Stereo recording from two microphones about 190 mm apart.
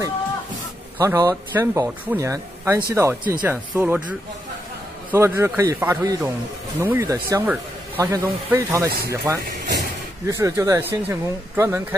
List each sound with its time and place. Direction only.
0.9 s speech: 15° right (ahead or behind)
5.1 s speech: 15° right (ahead or behind)